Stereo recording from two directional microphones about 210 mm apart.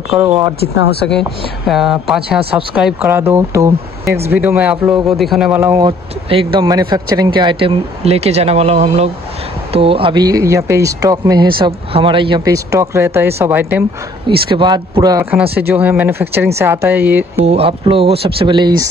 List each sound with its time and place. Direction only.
1.7 s speech: centre (ahead or behind)
14.2 s speech: 20° right (ahead or behind)
17.4 s speech: 30° right (ahead or behind)